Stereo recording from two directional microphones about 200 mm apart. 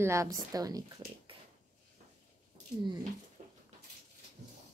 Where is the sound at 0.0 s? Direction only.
15° right (ahead or behind).